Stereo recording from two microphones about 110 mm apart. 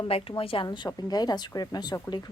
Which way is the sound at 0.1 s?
55° left (ahead or behind).